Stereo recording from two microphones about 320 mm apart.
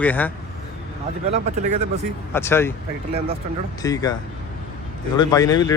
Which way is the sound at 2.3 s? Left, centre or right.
Centre.